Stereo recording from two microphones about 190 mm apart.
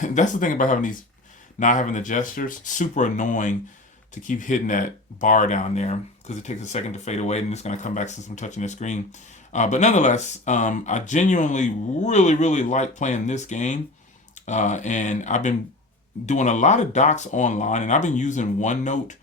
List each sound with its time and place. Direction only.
0.0 s speech: 40° left (ahead or behind)